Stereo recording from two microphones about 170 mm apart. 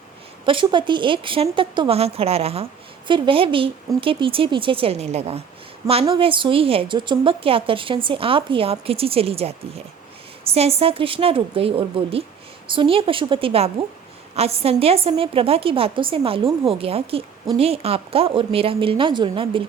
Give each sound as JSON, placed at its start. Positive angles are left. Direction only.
{"t": 0.4, "sound": "a woman's voice", "side_deg": -30}